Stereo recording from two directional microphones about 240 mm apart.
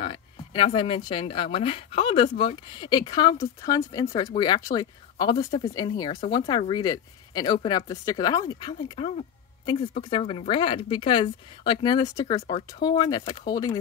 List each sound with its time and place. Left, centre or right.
0.0 s speech: left